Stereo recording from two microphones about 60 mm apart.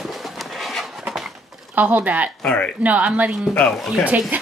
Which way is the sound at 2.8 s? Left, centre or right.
Right.